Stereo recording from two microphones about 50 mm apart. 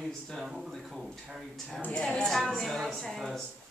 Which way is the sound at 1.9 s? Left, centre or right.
Centre.